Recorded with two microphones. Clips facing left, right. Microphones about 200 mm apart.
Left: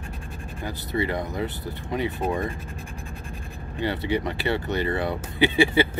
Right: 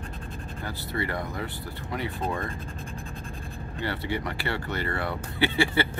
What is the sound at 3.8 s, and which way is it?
Speech, 20° left (ahead or behind).